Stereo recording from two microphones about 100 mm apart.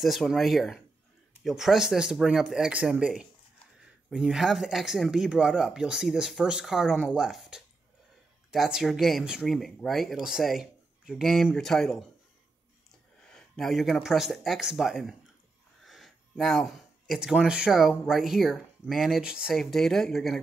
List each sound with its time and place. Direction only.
0.0 s speech: centre (ahead or behind)
13.3 s speech: 5° left (ahead or behind)